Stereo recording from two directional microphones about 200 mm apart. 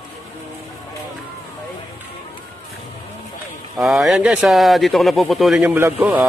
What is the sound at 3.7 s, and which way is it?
Speech, centre (ahead or behind).